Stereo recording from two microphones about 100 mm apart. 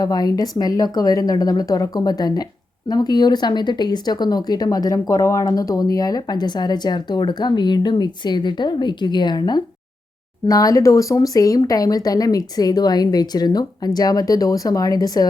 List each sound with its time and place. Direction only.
0.0 s speech: 40° left (ahead or behind)